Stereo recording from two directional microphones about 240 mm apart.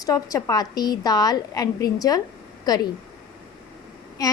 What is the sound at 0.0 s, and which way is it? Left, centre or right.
A woman's voice, centre.